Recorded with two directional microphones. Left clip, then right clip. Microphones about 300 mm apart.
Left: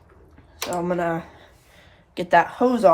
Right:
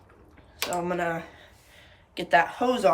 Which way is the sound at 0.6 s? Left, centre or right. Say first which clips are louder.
Left 4 dB; centre.